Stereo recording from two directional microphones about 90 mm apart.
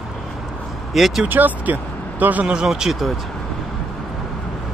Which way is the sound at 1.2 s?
20° right (ahead or behind).